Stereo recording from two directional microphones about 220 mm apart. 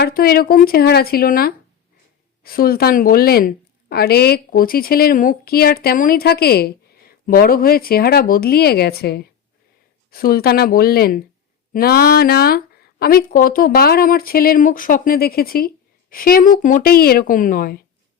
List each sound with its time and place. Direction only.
0.0 s a woman's voice: 45° left (ahead or behind)